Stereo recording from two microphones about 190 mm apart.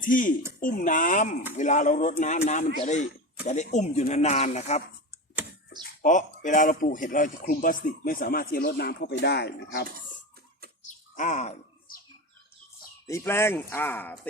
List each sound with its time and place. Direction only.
0.0 s speech: 45° left (ahead or behind)
6.0 s speech: 40° left (ahead or behind); by 9.8 s 60° left (ahead or behind)
10.8 s bird: 40° left (ahead or behind)
13.1 s speech: 15° left (ahead or behind)